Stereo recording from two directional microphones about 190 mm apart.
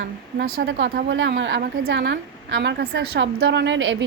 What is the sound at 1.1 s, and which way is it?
Speech, 75° right (ahead or behind).